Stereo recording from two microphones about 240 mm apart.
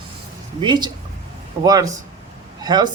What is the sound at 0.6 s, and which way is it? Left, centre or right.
A man's voice, centre.